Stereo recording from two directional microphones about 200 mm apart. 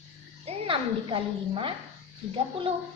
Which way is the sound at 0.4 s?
30° right (ahead or behind).